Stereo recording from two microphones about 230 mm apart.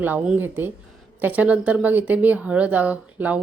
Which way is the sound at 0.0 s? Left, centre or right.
Centre.